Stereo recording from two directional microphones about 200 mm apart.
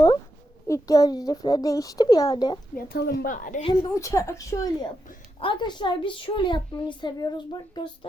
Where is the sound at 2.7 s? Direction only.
50° left (ahead or behind).